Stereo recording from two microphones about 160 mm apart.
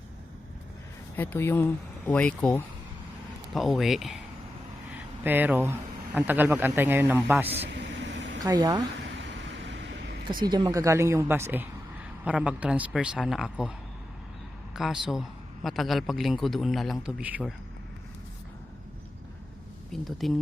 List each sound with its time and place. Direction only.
1.1 s a man's voice: 10° left (ahead or behind)
5.2 s a man's voice: 10° right (ahead or behind)
7.6 s vehicle: 90° right
8.4 s speech: 25° right (ahead or behind)
9.7 s a sound: 90° right
10.4 s a man's voice: 25° right (ahead or behind); by 17.5 s 10° right (ahead or behind)
19.9 s a man's voice: centre (ahead or behind)